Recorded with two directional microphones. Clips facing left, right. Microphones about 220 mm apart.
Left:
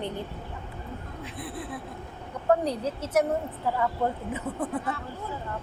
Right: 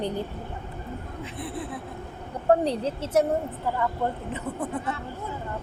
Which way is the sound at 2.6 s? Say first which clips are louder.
Right 2 dB; 30° right (ahead or behind).